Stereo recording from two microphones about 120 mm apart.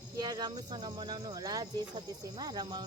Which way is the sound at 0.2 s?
35° right (ahead or behind).